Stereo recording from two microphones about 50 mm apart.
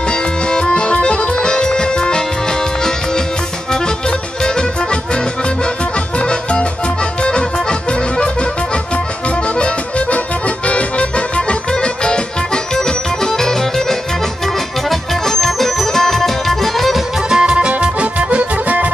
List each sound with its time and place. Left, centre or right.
0.5 s accordion: centre
6.1 s music: left
9.6 s accordion: left
12.7 s music: centre
17.3 s music: centre